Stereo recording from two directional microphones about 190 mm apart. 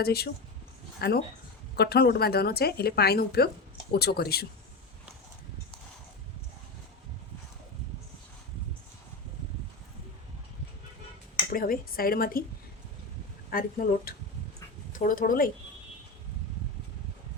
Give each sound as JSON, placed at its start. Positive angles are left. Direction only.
{"t": 0.0, "sound": "a woman's voice", "side_deg": 55}
{"t": 11.5, "sound": "speech", "side_deg": 50}
{"t": 13.5, "sound": "speech", "side_deg": 50}